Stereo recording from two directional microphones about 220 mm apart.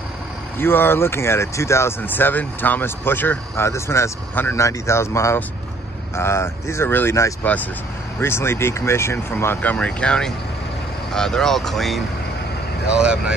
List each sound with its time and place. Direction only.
0.6 s speech: 10° left (ahead or behind)